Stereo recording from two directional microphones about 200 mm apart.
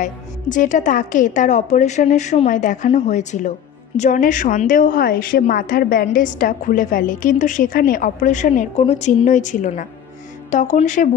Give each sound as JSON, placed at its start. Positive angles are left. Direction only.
{"t": 0.0, "sound": "a woman's voice", "side_deg": 40}